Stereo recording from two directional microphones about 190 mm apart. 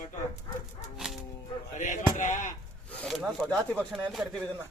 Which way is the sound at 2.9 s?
Centre (ahead or behind).